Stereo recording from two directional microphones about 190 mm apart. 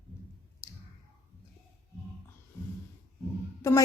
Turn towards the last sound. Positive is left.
turn(degrees=15)  # may be behind; listen again after turning